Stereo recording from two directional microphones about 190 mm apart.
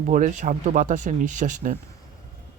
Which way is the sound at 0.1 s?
45° right (ahead or behind).